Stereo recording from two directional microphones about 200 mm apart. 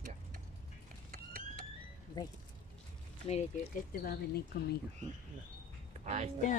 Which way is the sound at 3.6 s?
45° left (ahead or behind).